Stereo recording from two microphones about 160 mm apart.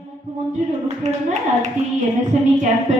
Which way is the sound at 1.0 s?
45° right (ahead or behind).